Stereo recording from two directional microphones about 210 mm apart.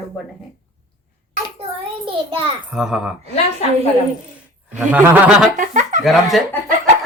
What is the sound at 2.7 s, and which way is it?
Speech, 5° right (ahead or behind).